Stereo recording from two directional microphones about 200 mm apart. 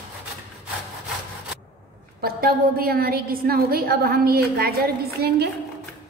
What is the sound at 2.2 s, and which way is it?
A woman's voice, 50° right (ahead or behind).